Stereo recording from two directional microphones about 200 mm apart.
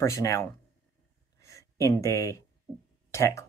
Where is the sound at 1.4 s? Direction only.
15° left (ahead or behind).